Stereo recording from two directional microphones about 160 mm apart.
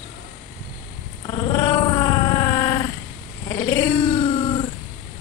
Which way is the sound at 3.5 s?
15° left (ahead or behind).